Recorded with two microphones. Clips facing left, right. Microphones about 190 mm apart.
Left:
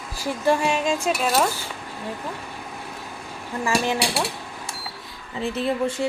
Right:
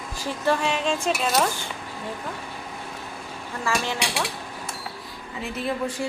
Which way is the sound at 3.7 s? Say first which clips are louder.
Left 4 dB; 10° left (ahead or behind).